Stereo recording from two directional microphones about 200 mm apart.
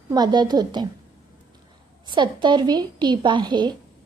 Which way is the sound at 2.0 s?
25° right (ahead or behind).